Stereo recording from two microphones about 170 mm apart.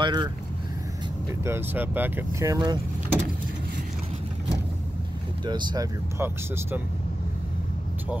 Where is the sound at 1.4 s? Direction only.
15° right (ahead or behind).